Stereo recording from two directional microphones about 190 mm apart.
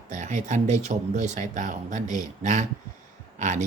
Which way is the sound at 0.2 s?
40° right (ahead or behind).